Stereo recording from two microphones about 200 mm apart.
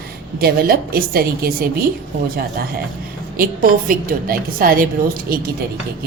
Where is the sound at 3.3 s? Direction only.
45° right (ahead or behind).